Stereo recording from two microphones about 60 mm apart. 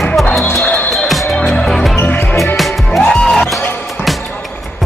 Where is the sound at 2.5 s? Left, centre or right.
Centre.